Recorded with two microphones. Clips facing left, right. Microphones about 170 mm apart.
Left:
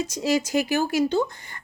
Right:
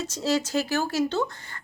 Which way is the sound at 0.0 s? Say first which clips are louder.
Left 2 dB; 15° left (ahead or behind).